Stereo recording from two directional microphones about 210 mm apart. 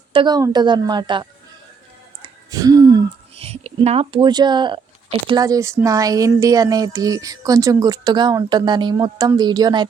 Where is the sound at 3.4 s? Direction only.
30° right (ahead or behind).